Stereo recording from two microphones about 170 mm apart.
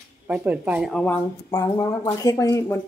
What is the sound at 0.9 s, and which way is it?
Speech, 5° left (ahead or behind).